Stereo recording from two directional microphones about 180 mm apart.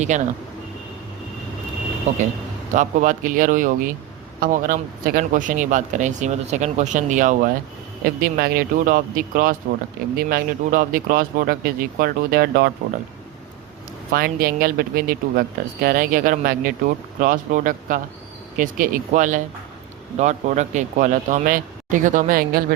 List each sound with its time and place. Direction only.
0.1 s speech: 40° right (ahead or behind)
2.1 s speech: 40° right (ahead or behind)
8.4 s speech: 55° right (ahead or behind)
14.1 s speech: 55° right (ahead or behind)